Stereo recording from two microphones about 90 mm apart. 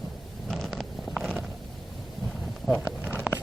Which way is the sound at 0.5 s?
Centre (ahead or behind).